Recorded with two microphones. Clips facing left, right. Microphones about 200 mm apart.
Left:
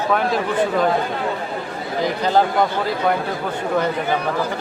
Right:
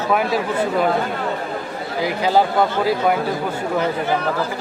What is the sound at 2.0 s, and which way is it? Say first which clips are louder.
Speech: right 1 dB; 10° right (ahead or behind).